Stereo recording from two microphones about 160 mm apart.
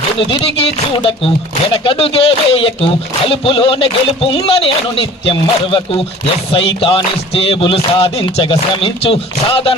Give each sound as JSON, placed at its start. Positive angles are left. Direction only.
{"t": 0.3, "sound": "speech", "side_deg": 35}